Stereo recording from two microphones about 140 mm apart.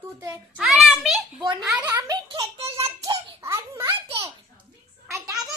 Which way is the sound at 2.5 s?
45° right (ahead or behind).